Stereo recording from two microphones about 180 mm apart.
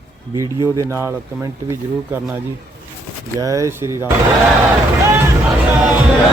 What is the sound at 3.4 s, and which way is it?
Speech, 20° right (ahead or behind).